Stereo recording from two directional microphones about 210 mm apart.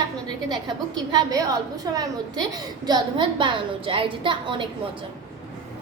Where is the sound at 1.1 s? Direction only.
15° right (ahead or behind).